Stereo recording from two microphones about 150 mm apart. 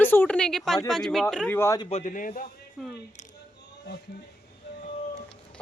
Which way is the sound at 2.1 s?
65° left (ahead or behind).